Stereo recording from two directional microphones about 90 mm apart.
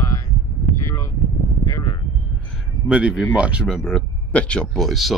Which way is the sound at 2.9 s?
10° right (ahead or behind).